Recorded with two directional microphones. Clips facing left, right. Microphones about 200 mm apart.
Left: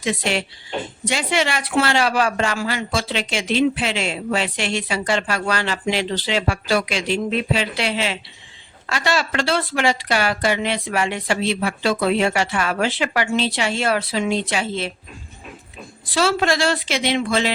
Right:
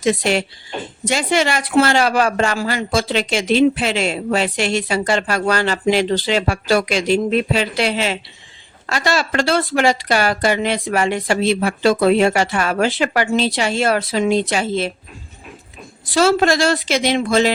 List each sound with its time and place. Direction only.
0.0 s a woman's voice: 40° right (ahead or behind)
16.1 s a woman's voice: 45° right (ahead or behind)